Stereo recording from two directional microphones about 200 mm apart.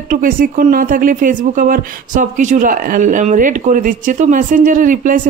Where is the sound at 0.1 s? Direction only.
45° right (ahead or behind).